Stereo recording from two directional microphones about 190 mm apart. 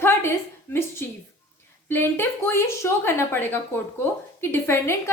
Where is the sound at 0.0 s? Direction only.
10° left (ahead or behind).